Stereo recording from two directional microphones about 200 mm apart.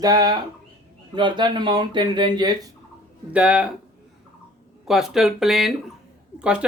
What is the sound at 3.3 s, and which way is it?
Speech, 5° right (ahead or behind).